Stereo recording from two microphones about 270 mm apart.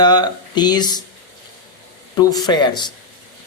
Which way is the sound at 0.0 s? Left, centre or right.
Centre.